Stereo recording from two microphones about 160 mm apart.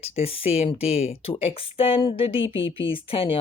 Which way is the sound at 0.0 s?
40° left (ahead or behind).